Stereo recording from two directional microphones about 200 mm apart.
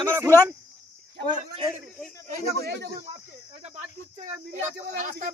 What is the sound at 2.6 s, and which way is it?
Speech, 55° right (ahead or behind).